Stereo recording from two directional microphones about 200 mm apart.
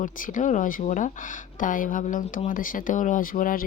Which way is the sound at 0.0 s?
40° left (ahead or behind).